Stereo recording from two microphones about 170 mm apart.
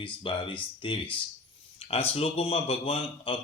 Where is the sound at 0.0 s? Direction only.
30° left (ahead or behind).